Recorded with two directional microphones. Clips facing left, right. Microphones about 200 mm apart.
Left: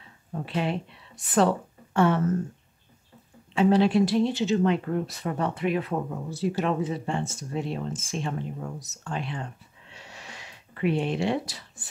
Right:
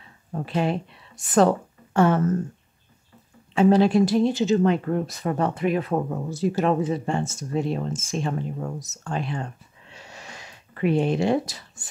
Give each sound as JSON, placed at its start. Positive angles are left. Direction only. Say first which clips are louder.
{"t": 0.3, "sound": "speech", "louder": "right 4 dB", "side_deg": -45}
{"t": 3.5, "sound": "speech", "louder": "right 3 dB", "side_deg": -45}
{"t": 9.9, "sound": "a sound", "louder": "right 2 dB", "side_deg": -45}